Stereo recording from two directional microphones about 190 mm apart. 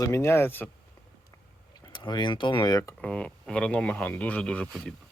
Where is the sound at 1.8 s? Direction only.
25° left (ahead or behind).